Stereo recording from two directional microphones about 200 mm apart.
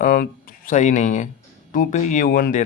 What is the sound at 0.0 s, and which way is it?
Speech, 45° left (ahead or behind).